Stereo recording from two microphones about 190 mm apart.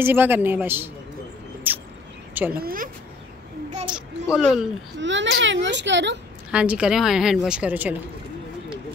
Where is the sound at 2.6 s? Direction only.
50° right (ahead or behind).